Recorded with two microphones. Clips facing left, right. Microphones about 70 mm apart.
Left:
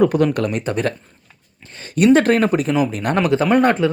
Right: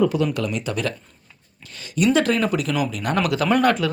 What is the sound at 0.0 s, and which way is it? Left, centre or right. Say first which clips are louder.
Speech: left 5 dB; left.